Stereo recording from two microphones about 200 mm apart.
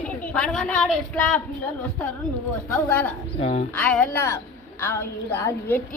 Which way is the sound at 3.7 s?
5° left (ahead or behind).